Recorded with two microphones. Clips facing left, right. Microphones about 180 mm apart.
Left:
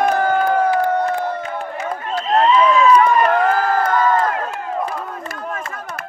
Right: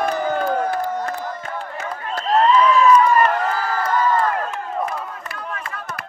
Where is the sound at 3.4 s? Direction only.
55° left (ahead or behind).